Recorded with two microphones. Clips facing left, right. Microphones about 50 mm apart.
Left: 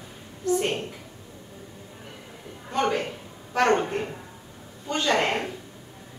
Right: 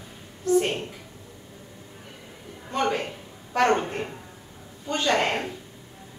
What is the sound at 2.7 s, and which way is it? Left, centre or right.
A woman's voice, centre.